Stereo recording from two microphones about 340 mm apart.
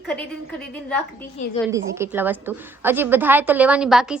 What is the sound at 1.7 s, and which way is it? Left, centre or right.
A woman's voice, centre.